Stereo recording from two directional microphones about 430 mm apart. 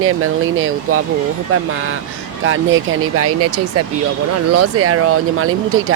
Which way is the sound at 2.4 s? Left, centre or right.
Right.